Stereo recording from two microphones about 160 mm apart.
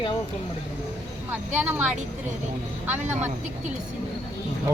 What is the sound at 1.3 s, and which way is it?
Speech, 10° right (ahead or behind).